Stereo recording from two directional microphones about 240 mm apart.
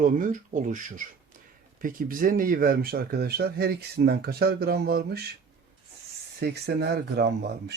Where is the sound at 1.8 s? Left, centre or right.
Right.